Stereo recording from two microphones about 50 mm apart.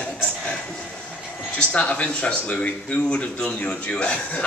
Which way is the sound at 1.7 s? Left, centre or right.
Left.